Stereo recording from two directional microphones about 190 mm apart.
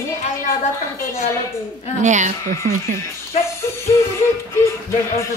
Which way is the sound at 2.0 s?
40° right (ahead or behind).